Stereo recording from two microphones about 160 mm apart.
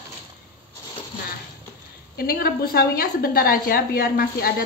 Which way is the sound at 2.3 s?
70° left (ahead or behind).